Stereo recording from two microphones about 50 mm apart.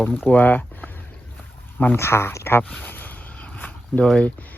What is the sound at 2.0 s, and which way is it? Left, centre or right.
Speech, left.